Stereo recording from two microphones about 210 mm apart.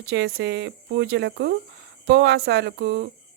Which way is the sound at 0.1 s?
50° right (ahead or behind).